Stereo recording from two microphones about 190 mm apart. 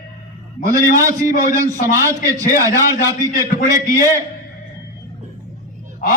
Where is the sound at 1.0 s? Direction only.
15° right (ahead or behind).